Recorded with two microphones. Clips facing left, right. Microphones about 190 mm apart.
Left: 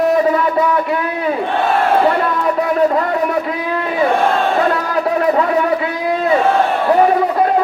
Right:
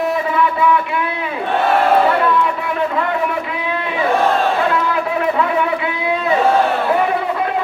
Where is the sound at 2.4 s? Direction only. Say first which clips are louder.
Left 6 dB; 40° left (ahead or behind).